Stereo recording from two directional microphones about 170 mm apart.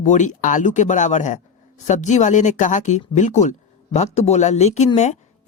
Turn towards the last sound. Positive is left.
turn(degrees=40)  # may be behind; listen again after turning